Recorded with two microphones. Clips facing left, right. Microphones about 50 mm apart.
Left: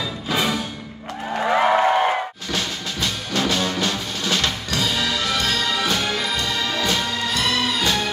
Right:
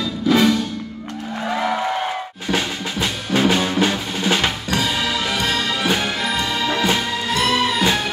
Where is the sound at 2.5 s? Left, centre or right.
Centre.